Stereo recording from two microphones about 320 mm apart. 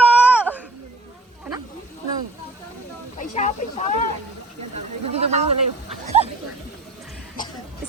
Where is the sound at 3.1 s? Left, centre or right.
Left.